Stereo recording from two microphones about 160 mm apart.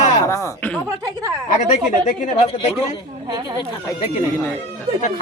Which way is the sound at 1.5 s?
50° left (ahead or behind).